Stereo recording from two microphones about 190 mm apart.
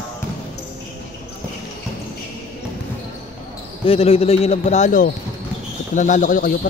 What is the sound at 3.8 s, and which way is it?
A man's voice, 30° left (ahead or behind).